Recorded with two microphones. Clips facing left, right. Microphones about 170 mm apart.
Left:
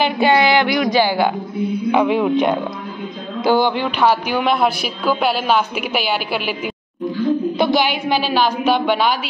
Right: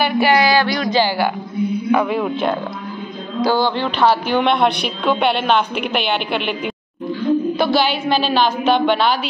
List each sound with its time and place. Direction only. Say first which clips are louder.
0.0 s a woman's voice: even; 20° left (ahead or behind); by 6.7 s 5° left (ahead or behind)
7.5 s a woman's voice: even; 20° left (ahead or behind)